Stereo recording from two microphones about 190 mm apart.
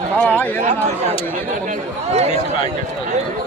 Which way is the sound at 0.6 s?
35° right (ahead or behind).